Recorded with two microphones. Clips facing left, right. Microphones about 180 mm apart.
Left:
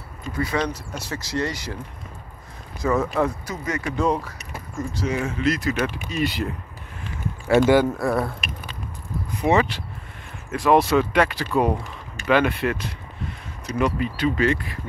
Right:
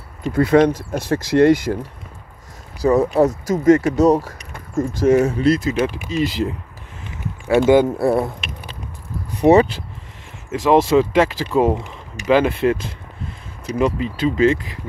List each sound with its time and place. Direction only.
0.2 s speech: 60° right (ahead or behind)
2.8 s speech: 35° right (ahead or behind)
6.0 s speech: 90° right
7.4 s speech: 15° right (ahead or behind)
9.3 s speech: 40° right (ahead or behind)
10.5 s speech: 20° right (ahead or behind)
13.7 s speech: 30° right (ahead or behind)